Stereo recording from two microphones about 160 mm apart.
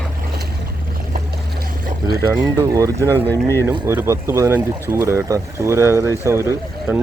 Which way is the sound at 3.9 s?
15° right (ahead or behind).